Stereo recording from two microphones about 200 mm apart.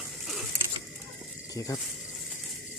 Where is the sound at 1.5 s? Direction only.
15° left (ahead or behind).